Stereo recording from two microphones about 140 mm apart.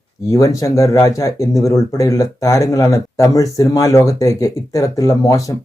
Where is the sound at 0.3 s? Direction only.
25° left (ahead or behind).